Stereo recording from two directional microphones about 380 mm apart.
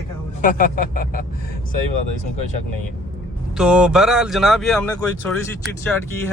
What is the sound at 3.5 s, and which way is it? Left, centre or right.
Speech, centre.